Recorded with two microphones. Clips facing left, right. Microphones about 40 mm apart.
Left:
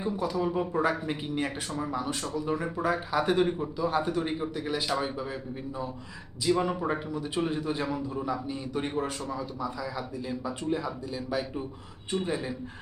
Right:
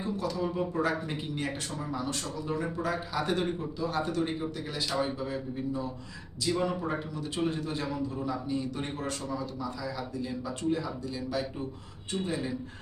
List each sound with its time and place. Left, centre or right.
0.0 s speech: centre